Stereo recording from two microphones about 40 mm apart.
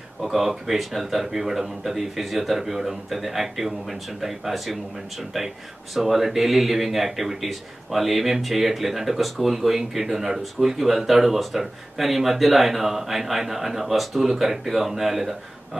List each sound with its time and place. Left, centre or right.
0.2 s speech: centre
5.9 s speech: centre